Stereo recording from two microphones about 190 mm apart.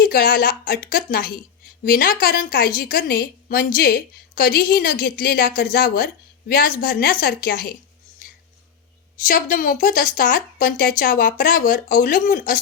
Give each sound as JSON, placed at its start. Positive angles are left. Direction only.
{"t": 0.0, "sound": "a woman's voice", "side_deg": 50}
{"t": 9.2, "sound": "a woman's voice", "side_deg": 45}